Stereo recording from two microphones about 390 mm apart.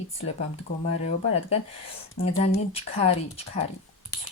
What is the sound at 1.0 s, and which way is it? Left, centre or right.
Speech, centre.